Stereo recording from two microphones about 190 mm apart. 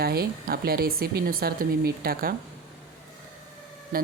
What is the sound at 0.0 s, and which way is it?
A woman's voice, 55° right (ahead or behind).